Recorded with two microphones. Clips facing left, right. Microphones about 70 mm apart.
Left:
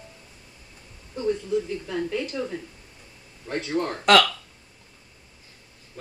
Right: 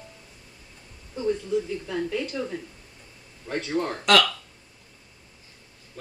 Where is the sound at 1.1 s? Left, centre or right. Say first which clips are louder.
Even; centre.